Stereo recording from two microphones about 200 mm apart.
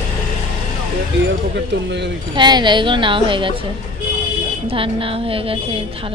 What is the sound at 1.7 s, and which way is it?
Speech, 60° right (ahead or behind).